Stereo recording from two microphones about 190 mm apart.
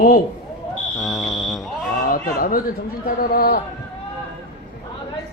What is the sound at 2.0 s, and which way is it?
A man's voice, 50° left (ahead or behind).